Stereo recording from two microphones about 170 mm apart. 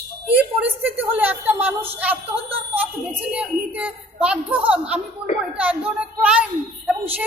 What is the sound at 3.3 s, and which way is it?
A woman's voice, 5° right (ahead or behind).